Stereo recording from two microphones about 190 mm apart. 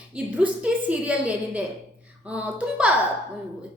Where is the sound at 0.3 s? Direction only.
5° right (ahead or behind).